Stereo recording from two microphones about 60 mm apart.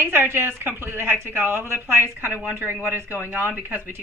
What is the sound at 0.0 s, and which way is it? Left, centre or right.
A woman's voice, right.